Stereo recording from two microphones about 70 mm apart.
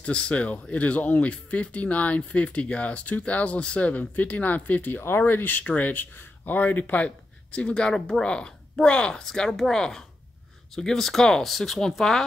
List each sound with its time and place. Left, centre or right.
0.0 s speech: centre